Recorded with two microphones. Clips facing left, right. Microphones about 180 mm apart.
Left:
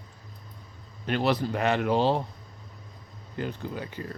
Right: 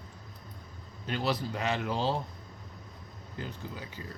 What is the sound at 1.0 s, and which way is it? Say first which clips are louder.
Speech: left 6 dB; 65° left (ahead or behind).